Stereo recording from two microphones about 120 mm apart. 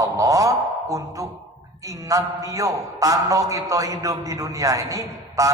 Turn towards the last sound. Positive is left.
turn(degrees=-30)  # may be behind; listen again after turning